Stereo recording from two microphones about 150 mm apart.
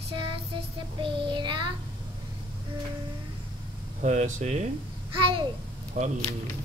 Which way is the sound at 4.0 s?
55° right (ahead or behind).